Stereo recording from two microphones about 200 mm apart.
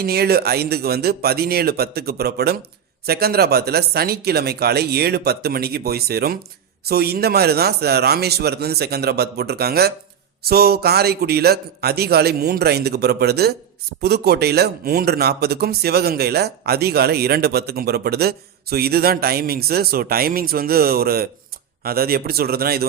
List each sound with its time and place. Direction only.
0.0 s speech: 50° right (ahead or behind)